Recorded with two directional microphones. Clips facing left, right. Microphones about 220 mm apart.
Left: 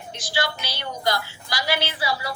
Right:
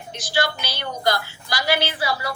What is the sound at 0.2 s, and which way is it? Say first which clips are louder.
A woman's voice: right 3 dB; 55° right (ahead or behind).